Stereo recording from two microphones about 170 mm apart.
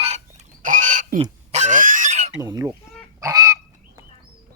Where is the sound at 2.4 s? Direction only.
20° right (ahead or behind).